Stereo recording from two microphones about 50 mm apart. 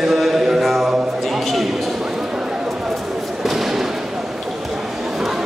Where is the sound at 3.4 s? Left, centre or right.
Centre.